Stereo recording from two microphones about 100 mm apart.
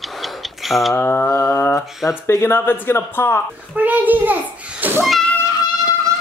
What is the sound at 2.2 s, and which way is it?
Speech, 25° left (ahead or behind).